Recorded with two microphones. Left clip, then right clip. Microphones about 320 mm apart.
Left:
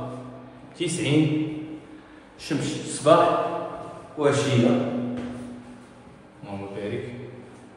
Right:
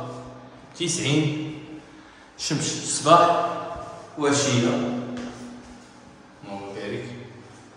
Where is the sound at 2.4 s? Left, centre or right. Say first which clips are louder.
Right 1 dB; centre.